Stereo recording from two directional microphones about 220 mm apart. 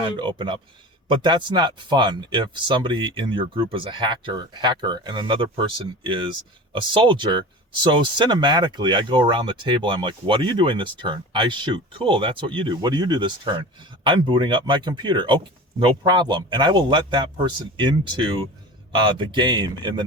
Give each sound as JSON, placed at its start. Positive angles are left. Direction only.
{"t": 0.0, "sound": "speech", "side_deg": -20}